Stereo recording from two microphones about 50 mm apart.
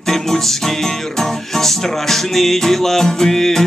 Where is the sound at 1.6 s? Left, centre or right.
Centre.